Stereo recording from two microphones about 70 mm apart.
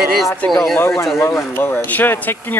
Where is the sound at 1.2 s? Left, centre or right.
Left.